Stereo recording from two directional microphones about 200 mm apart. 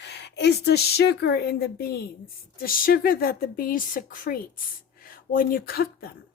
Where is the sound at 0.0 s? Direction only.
60° left (ahead or behind).